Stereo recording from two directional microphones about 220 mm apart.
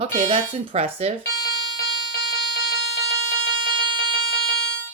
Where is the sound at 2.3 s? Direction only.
50° left (ahead or behind).